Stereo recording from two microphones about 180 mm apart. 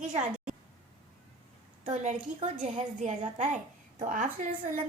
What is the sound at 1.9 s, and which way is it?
A woman's voice, 40° right (ahead or behind).